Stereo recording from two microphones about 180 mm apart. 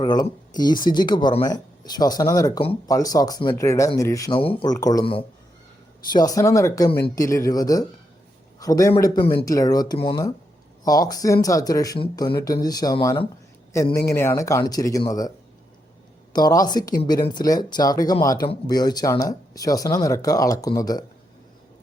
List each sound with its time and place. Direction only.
0.0 s speech: 20° left (ahead or behind)
16.3 s speech: 20° left (ahead or behind)